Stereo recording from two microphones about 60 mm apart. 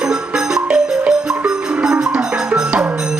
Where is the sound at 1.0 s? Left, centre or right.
Right.